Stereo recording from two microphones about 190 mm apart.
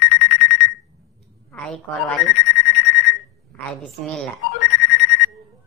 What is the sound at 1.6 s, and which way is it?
Speech, 5° left (ahead or behind).